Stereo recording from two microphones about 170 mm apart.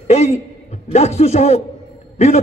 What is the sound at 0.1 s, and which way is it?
A man's voice, 40° left (ahead or behind).